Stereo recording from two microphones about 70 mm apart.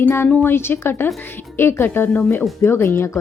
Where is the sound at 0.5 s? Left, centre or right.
Left.